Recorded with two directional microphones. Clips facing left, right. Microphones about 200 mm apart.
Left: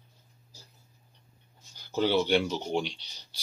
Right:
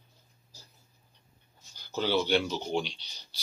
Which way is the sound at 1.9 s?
55° left (ahead or behind).